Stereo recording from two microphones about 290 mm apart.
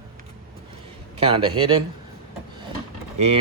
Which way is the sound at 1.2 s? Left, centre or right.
Centre.